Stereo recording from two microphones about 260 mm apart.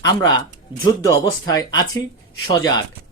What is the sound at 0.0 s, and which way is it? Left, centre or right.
Speech, centre.